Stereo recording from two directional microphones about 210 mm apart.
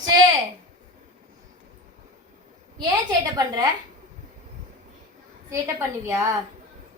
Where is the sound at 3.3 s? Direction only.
15° right (ahead or behind).